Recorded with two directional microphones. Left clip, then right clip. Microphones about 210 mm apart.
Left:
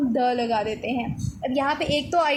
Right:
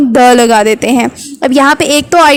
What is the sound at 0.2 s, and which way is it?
Speech, 55° right (ahead or behind).